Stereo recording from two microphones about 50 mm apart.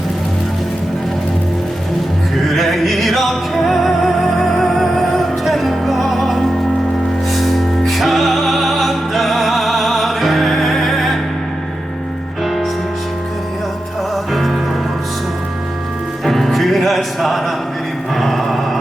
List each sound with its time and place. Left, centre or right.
2.5 s music: centre
14.3 s music: centre
16.2 s music: centre